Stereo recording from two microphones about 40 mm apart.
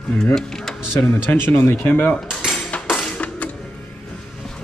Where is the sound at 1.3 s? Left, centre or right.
Left.